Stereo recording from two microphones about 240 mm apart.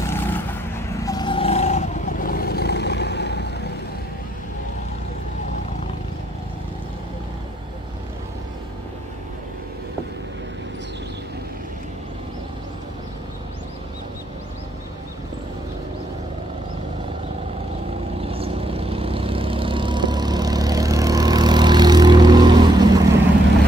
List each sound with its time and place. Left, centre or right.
0.0 s vehicle: centre; by 3.4 s left
18.2 s vehicle: right